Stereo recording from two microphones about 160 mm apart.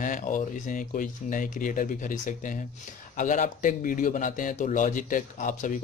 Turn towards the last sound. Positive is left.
turn(degrees=55)  # may be behind; listen again after turning